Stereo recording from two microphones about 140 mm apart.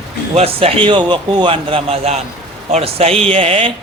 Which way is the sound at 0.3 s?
45° right (ahead or behind).